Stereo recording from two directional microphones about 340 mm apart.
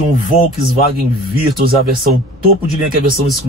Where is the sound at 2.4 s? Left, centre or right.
Right.